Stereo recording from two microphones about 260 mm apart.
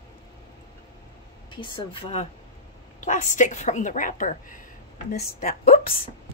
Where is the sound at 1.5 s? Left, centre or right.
Centre.